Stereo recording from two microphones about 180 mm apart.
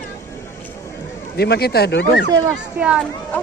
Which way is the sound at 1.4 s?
60° left (ahead or behind).